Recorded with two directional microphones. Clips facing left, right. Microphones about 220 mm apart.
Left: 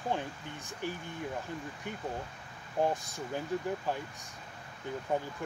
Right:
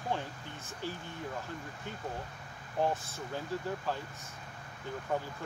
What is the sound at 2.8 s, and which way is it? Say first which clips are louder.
Speech: even; 15° left (ahead or behind).